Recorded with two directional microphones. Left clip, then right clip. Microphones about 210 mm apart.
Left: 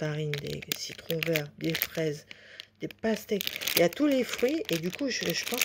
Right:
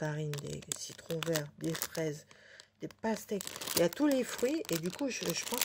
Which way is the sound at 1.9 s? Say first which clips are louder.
Left 6 dB; 5° left (ahead or behind).